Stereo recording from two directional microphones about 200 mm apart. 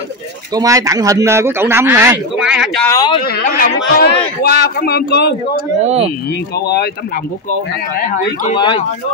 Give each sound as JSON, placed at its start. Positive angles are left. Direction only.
{"t": 0.6, "sound": "speech", "side_deg": -15}
{"t": 2.9, "sound": "speech", "side_deg": 20}
{"t": 3.2, "sound": "a man's voice", "side_deg": 50}
{"t": 5.8, "sound": "speech", "side_deg": -30}
{"t": 6.6, "sound": "a man's voice", "side_deg": 55}
{"t": 8.5, "sound": "speech", "side_deg": 25}